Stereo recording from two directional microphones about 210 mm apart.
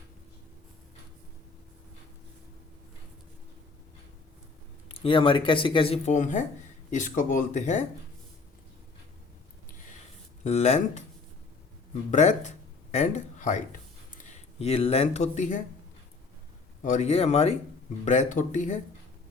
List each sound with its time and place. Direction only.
4.9 s speech: 25° left (ahead or behind)
10.4 s speech: 30° left (ahead or behind)
12.1 s speech: 35° left (ahead or behind)
16.8 s speech: 35° left (ahead or behind)